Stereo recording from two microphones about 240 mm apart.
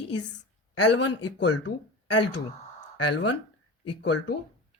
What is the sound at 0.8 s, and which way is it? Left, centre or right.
Speech, left.